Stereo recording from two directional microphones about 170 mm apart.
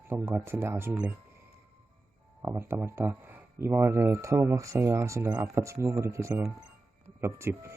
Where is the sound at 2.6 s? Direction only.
15° right (ahead or behind).